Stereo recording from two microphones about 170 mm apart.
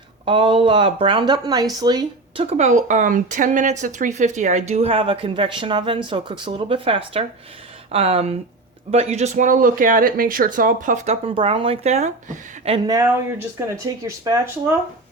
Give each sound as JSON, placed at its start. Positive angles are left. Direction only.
{"t": 0.3, "sound": "speech", "side_deg": -30}
{"t": 12.9, "sound": "speech", "side_deg": -20}